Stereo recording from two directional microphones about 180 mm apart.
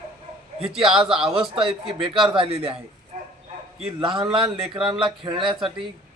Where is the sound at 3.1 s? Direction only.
40° right (ahead or behind).